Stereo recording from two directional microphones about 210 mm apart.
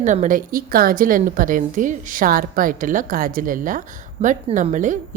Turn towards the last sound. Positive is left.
turn(degrees=-35)  # may be behind; listen again after turning